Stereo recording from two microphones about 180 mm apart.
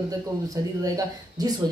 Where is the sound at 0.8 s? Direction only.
20° right (ahead or behind).